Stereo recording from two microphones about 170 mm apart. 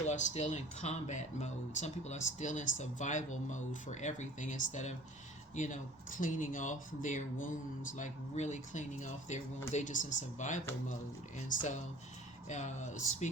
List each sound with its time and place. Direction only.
0.0 s speech: 45° left (ahead or behind)